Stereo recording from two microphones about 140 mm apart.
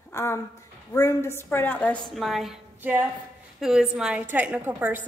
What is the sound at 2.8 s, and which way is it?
A woman's voice, 15° right (ahead or behind).